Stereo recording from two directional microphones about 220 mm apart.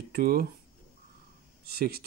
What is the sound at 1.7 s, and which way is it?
Speech, 45° right (ahead or behind).